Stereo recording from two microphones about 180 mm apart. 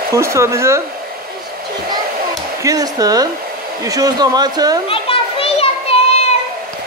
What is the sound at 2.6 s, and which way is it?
Speech, 20° right (ahead or behind).